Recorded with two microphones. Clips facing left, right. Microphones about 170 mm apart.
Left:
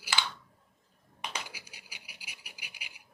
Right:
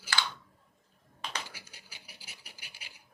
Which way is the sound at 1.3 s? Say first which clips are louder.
Even; 10° left (ahead or behind).